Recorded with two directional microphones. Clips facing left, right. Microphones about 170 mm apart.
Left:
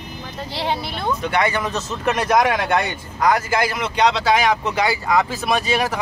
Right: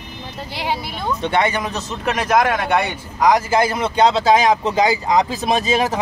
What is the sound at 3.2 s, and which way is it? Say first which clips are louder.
Speech: right 3 dB; 15° right (ahead or behind).